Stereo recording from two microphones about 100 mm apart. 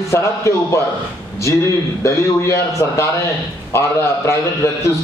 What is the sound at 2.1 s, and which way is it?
A man's voice, 30° left (ahead or behind).